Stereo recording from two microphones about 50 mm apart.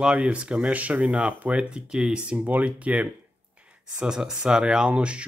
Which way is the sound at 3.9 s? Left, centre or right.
Centre.